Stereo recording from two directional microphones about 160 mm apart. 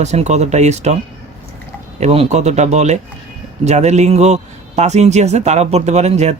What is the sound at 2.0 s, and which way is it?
Speech, 45° right (ahead or behind).